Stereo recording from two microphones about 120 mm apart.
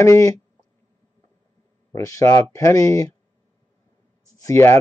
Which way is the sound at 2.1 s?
25° left (ahead or behind).